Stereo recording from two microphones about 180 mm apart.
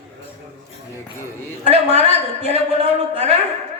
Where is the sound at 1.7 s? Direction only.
35° right (ahead or behind).